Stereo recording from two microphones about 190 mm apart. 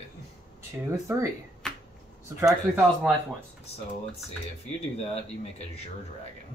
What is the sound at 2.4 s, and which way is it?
Speech, centre (ahead or behind).